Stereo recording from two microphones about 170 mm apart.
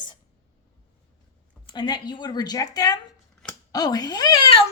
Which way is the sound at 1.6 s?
25° left (ahead or behind).